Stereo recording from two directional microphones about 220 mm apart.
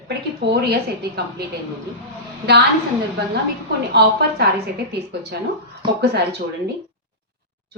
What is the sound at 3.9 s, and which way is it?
A woman's voice, 50° right (ahead or behind).